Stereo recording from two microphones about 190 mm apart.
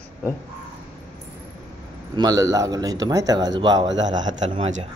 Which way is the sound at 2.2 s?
20° right (ahead or behind).